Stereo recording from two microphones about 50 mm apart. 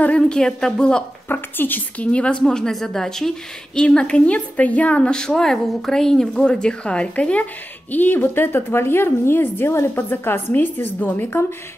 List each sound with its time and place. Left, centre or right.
0.0 s speech: left
1.3 s a woman's voice: left
2.0 s a woman's voice: left
5.1 s speech: centre
7.9 s a woman's voice: left